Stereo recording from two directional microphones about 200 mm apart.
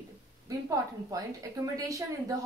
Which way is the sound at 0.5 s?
15° right (ahead or behind).